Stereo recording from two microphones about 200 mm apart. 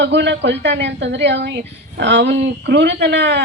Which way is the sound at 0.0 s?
60° right (ahead or behind).